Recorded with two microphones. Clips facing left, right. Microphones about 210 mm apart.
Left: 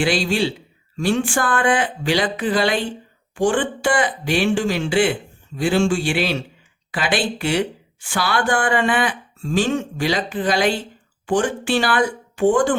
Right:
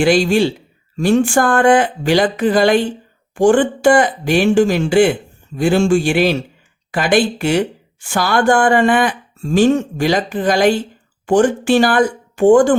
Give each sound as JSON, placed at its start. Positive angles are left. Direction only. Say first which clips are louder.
{"t": 0.0, "sound": "speech", "louder": "right 7 dB", "side_deg": -45}